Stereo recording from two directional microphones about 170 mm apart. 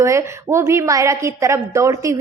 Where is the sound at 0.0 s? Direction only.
15° right (ahead or behind).